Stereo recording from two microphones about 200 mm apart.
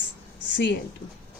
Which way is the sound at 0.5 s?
60° left (ahead or behind).